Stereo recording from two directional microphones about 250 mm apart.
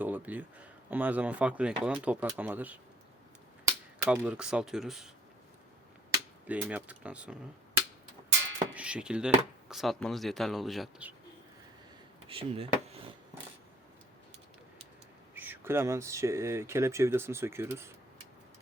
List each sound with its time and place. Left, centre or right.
0.0 s speech: centre
6.5 s speech: centre
8.7 s speech: centre
12.3 s a sound: right
15.4 s speech: centre